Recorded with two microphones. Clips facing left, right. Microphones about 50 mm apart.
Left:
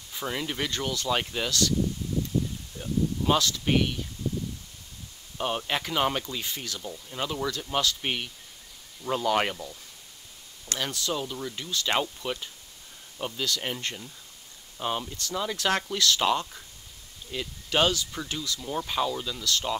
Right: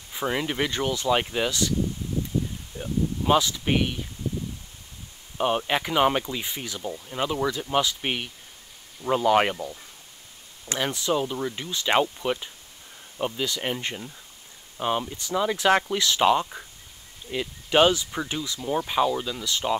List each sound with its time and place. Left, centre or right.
0.1 s speech: right
2.8 s a sound: centre
5.4 s speech: centre
10.6 s speech: right